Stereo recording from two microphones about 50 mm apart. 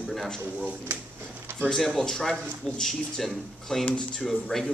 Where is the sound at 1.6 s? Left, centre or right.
Centre.